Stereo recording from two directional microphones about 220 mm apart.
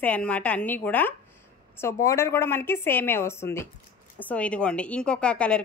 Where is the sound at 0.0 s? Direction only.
5° left (ahead or behind).